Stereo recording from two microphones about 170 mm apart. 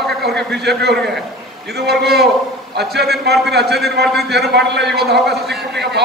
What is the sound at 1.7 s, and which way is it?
Speech, 70° right (ahead or behind).